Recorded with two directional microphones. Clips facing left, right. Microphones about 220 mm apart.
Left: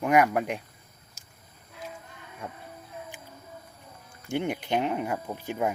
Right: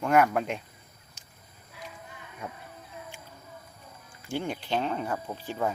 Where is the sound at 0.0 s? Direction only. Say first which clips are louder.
Left 1 dB; 15° left (ahead or behind).